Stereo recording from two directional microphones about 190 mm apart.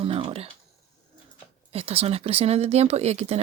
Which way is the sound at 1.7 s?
30° right (ahead or behind).